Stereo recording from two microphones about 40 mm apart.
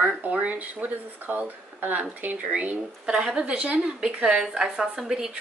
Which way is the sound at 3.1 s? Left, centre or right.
Centre.